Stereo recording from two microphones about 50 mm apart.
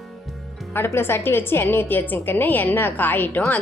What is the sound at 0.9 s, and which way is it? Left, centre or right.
A woman's voice, left.